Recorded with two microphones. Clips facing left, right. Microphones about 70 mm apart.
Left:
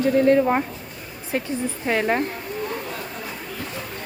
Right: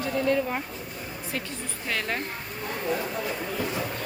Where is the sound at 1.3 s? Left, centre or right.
Left.